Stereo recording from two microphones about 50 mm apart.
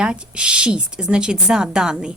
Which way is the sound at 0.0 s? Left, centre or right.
Centre.